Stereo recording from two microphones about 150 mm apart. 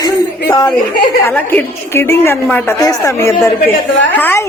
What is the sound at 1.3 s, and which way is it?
A woman's voice, 10° left (ahead or behind).